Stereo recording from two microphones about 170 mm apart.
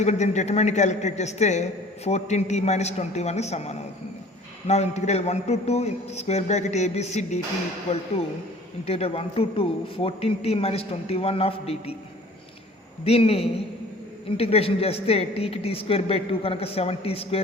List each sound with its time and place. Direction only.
0.0 s a woman's voice: 40° left (ahead or behind)
13.1 s a man's voice: 35° left (ahead or behind)